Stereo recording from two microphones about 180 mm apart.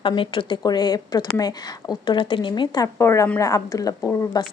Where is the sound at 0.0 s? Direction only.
30° left (ahead or behind).